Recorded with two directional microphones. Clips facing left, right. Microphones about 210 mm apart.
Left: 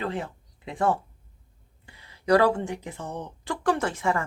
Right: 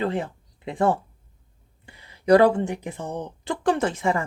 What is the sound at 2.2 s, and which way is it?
Speech, 20° right (ahead or behind).